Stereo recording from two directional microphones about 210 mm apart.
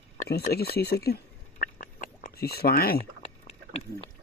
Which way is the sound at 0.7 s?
50° left (ahead or behind).